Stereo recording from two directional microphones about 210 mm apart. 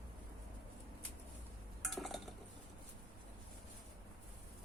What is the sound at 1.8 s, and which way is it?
Dishes, centre (ahead or behind).